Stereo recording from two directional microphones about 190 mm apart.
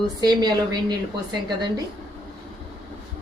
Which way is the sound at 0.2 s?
20° right (ahead or behind).